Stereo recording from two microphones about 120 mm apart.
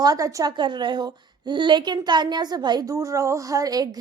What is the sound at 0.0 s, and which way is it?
A woman's voice, 30° right (ahead or behind).